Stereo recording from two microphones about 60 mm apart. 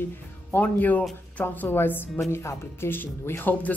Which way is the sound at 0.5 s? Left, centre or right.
Left.